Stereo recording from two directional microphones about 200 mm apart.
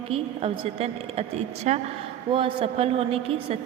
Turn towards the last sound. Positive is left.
turn(degrees=-30)  # may be behind; listen again after turning